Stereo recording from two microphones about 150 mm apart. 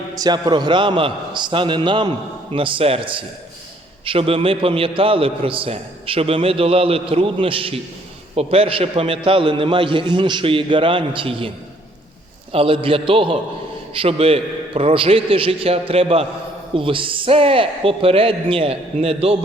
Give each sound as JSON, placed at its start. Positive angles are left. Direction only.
{"t": 0.1, "sound": "a man's voice", "side_deg": -25}